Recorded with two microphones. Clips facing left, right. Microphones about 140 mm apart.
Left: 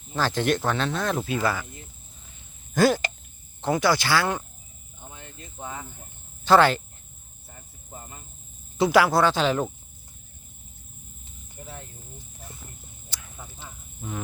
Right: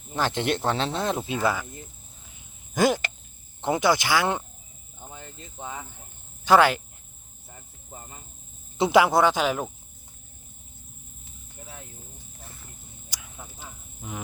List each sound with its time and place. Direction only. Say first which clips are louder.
0.1 s speech: left 2 dB; 20° right (ahead or behind)
2.3 s a sound: left 3 dB; 15° right (ahead or behind)
3.6 s speech: even; 20° right (ahead or behind)
6.4 s speech: left 1 dB; 10° right (ahead or behind)
8.8 s speech: even; 20° right (ahead or behind)
13.1 s a sound: even; 10° right (ahead or behind)